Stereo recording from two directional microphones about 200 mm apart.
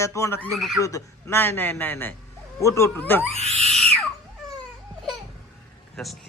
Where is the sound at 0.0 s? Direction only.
15° left (ahead or behind).